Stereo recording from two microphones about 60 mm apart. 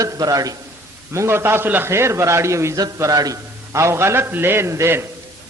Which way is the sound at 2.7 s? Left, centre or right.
Right.